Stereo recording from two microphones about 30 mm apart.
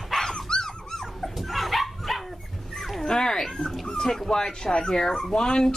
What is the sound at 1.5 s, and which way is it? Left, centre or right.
Dog, centre.